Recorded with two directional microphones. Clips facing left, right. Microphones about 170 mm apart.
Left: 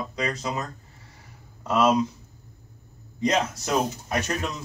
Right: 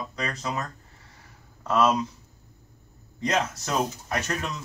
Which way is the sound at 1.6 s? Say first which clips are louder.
Left 1 dB; 15° left (ahead or behind).